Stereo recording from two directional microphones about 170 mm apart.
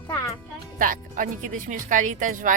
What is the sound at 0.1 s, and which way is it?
Music, 10° left (ahead or behind).